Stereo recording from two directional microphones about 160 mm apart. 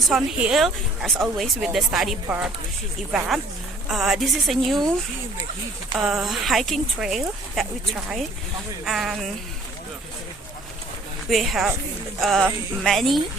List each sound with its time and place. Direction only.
0.1 s a woman's voice: 5° right (ahead or behind)
6.0 s a woman's voice: centre (ahead or behind)
8.8 s a woman's voice: 5° right (ahead or behind)
11.3 s a woman's voice: centre (ahead or behind)